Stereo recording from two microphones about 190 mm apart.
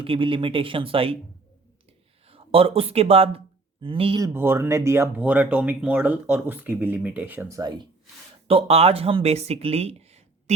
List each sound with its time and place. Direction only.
0.0 s speech: 25° right (ahead or behind)
2.2 s speech: 30° right (ahead or behind)
4.4 s speech: 10° right (ahead or behind)
8.4 s speech: 30° right (ahead or behind)